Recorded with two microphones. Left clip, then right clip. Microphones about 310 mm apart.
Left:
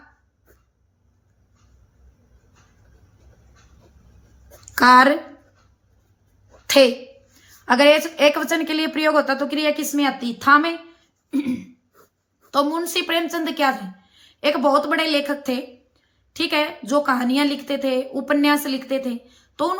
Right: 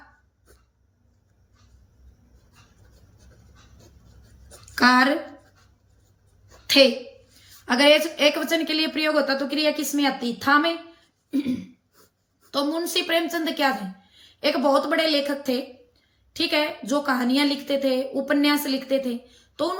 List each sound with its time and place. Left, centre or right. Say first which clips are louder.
4.7 s speech: left 6 dB; centre
6.7 s a woman's voice: left 2 dB; centre
11.3 s throat clearing: left 2 dB; centre
12.5 s a woman's voice: left 5 dB; centre